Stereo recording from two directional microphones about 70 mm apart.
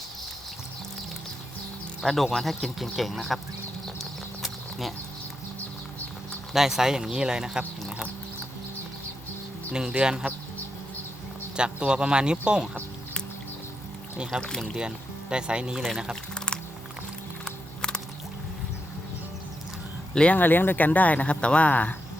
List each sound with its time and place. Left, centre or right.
2.0 s speech: centre
4.4 s a sound: centre
6.5 s speech: centre
7.8 s a sound: centre
9.7 s speech: centre
11.5 s speech: centre
14.4 s speech: centre
14.8 s speech: centre
17.4 s music: centre
20.1 s speech: centre
20.4 s speech: left